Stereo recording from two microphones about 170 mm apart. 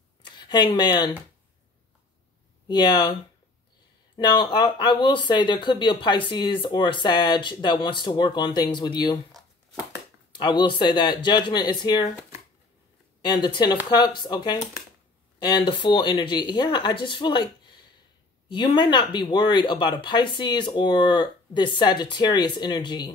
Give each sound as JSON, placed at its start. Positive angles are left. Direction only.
{"t": 0.2, "sound": "speech", "side_deg": 25}
{"t": 2.7, "sound": "speech", "side_deg": 25}
{"t": 4.4, "sound": "speech", "side_deg": 25}
{"t": 10.3, "sound": "speech", "side_deg": 25}
{"t": 13.3, "sound": "speech", "side_deg": 25}